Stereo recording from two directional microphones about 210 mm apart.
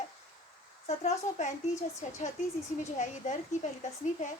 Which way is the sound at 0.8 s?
30° left (ahead or behind).